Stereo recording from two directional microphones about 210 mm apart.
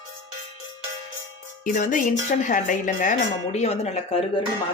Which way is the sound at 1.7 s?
40° left (ahead or behind).